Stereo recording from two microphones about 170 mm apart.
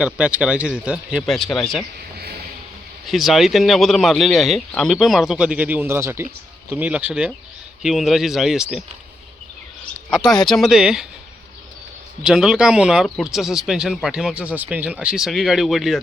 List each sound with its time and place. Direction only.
0.0 s speech: 5° right (ahead or behind)
2.1 s a sound: 65° right (ahead or behind)
3.1 s speech: centre (ahead or behind)
10.1 s speech: 5° right (ahead or behind)
12.2 s speech: 5° right (ahead or behind)